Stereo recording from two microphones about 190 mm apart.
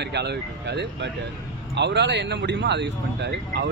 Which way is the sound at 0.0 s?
60° right (ahead or behind).